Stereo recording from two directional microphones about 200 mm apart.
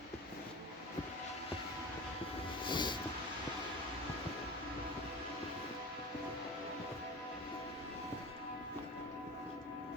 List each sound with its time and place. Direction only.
2.6 s train: 25° left (ahead or behind)